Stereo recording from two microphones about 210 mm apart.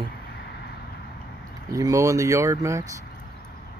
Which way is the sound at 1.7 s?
15° right (ahead or behind).